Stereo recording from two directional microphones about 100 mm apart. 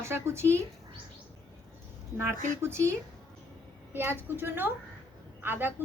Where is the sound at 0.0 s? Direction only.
25° right (ahead or behind).